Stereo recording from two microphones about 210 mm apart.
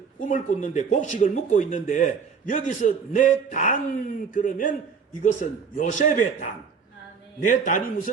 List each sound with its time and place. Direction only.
0.3 s speech: 35° left (ahead or behind)